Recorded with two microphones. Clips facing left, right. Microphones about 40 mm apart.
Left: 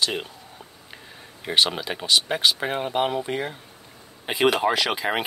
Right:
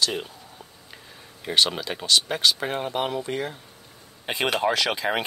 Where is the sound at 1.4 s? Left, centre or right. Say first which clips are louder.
Left 1 dB; centre.